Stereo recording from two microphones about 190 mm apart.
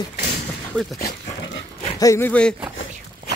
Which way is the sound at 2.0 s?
15° left (ahead or behind).